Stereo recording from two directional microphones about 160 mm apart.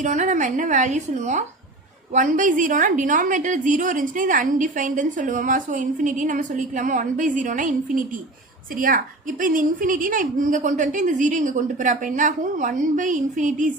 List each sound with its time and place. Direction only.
0.0 s a woman's voice: 50° right (ahead or behind)